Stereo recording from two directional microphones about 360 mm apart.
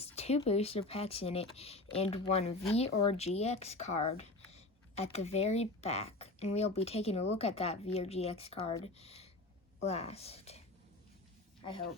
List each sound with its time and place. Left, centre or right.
0.0 s speech: centre